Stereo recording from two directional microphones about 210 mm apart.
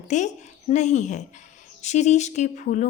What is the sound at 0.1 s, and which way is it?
A woman's voice, 35° left (ahead or behind).